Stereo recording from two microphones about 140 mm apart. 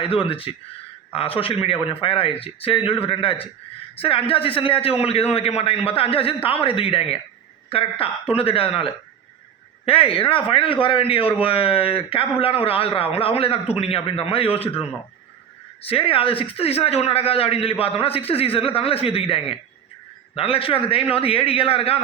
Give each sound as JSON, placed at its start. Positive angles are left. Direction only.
{"t": 0.0, "sound": "a man's voice", "side_deg": 40}
{"t": 15.8, "sound": "a man's voice", "side_deg": 40}